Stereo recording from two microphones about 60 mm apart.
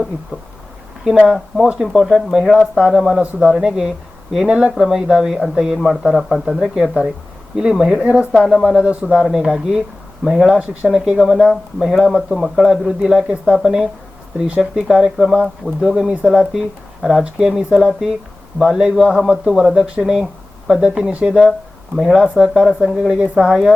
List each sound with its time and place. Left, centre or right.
1.3 s speech: centre
3.2 s speech: centre
4.4 s a man's voice: centre
4.7 s a man's voice: centre
9.0 s speech: centre
16.4 s speech: centre
23.2 s speech: centre